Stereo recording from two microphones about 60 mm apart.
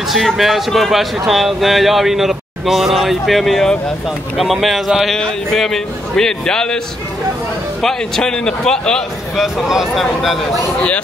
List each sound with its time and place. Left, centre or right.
0.1 s a man's voice: centre
7.8 s a man's voice: centre
9.4 s speech: centre